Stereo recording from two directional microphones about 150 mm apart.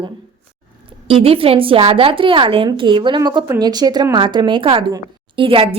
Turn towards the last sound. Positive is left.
turn(degrees=-35)  # may be behind; listen again after turning